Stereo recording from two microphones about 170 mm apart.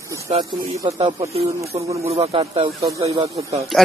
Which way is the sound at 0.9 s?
30° right (ahead or behind).